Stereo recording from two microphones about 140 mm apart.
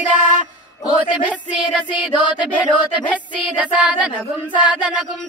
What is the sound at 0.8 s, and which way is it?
Speech, 35° left (ahead or behind).